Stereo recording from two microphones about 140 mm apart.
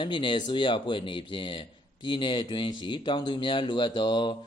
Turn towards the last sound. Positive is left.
turn(degrees=30)  # may be behind; listen again after turning